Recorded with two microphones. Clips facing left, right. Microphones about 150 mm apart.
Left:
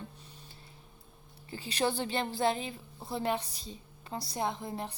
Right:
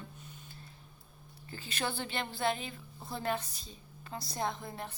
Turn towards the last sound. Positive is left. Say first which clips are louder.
# left 3 dB
turn(degrees=30)  # may be behind; listen again after turning